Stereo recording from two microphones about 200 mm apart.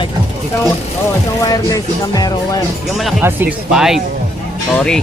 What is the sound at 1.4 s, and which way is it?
Music, 20° left (ahead or behind).